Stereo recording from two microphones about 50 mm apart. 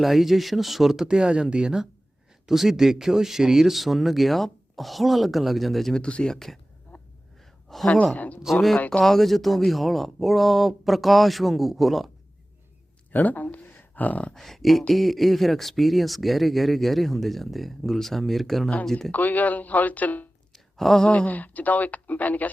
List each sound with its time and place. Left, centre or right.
0.0 s speech: centre
1.0 s speech: centre
5.9 s speech: centre
6.3 s speech: centre
6.9 s a sound: left
7.7 s speech: centre
8.1 s speech: left
9.0 s speech: centre
13.1 s speech: left
14.3 s speech: centre
19.1 s speech: left
20.5 s a sound: centre
21.1 s speech: left